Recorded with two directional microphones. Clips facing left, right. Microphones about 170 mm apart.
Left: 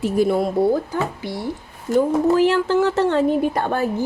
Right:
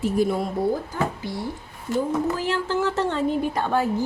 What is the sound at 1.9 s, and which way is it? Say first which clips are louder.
A woman's voice: left 8 dB; 75° left (ahead or behind).